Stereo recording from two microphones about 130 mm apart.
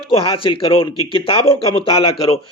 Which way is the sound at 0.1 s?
45° left (ahead or behind).